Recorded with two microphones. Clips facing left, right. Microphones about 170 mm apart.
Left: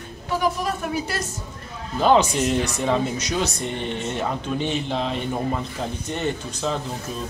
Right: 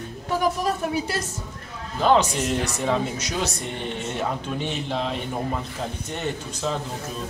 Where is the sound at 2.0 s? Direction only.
5° left (ahead or behind).